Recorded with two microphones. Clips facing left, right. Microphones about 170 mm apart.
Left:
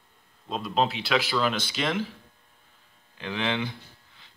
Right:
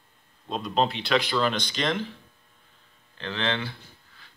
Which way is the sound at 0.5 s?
Centre (ahead or behind).